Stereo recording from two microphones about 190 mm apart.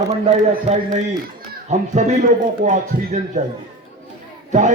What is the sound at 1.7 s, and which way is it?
A man's voice, 40° right (ahead or behind).